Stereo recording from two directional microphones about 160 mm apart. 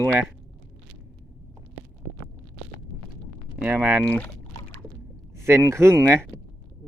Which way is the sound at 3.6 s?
10° right (ahead or behind).